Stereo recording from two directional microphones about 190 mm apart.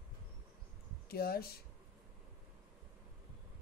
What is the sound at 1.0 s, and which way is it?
Speech, 55° left (ahead or behind).